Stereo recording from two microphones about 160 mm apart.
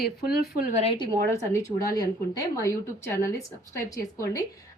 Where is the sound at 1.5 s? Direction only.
20° left (ahead or behind).